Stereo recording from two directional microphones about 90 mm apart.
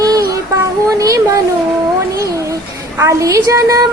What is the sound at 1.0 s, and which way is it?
Speech, 40° right (ahead or behind).